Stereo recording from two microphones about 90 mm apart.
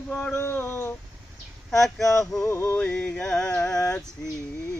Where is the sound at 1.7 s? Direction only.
5° left (ahead or behind).